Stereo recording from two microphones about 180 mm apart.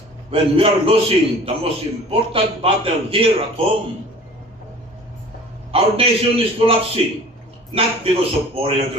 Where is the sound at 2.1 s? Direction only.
30° right (ahead or behind).